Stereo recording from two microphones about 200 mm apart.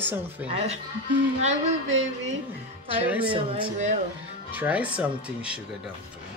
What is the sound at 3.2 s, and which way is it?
Speech, 25° right (ahead or behind).